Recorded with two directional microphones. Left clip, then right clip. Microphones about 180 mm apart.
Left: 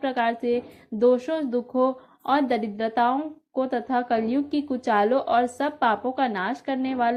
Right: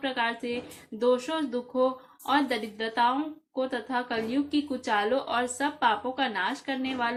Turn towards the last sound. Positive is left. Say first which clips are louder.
# left 5 dB
turn(degrees=40)  # may be behind; listen again after turning